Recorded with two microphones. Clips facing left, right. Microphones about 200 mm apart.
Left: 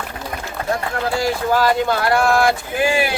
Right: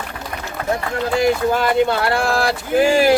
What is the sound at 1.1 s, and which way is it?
Speech, 20° right (ahead or behind).